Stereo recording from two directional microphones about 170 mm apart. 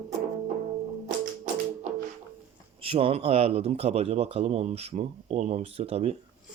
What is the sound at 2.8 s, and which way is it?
Speech, 35° right (ahead or behind).